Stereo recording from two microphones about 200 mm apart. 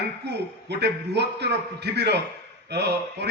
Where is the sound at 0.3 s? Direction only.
55° right (ahead or behind).